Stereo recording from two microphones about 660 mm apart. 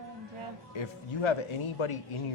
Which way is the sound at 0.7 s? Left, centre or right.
Left.